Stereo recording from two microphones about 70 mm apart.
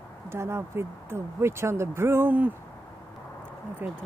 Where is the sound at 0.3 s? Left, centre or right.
Right.